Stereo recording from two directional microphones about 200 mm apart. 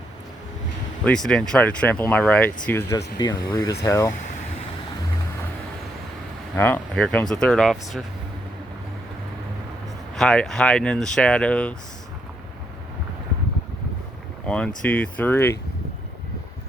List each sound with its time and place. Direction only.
1.0 s speech: 5° left (ahead or behind)
3.2 s speech: 20° left (ahead or behind)
6.6 s speech: 5° left (ahead or behind)
10.2 s speech: 5° left (ahead or behind)
14.4 s speech: 5° left (ahead or behind)